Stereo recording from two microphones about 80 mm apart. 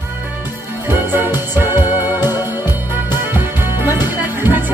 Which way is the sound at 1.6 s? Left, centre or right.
Right.